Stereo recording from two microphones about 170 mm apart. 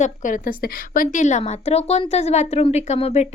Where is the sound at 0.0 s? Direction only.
50° left (ahead or behind).